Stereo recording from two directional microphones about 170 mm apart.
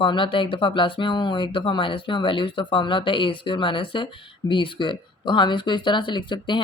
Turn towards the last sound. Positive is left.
turn(degrees=25)  # may be behind; listen again after turning